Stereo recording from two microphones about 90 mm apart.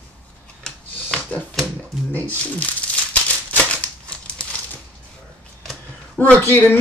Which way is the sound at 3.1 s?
15° left (ahead or behind).